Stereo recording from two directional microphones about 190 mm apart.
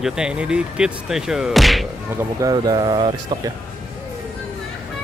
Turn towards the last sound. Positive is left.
turn(degrees=-20)  # may be behind; listen again after turning